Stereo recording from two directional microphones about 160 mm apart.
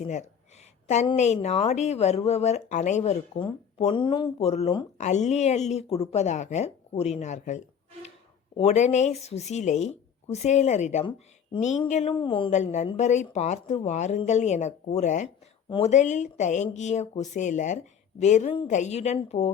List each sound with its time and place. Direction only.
0.0 s speech: 45° left (ahead or behind)
11.5 s speech: 30° left (ahead or behind)
11.9 s speech: 45° left (ahead or behind)
12.1 s speech: 30° left (ahead or behind)
12.5 s speech: 45° left (ahead or behind)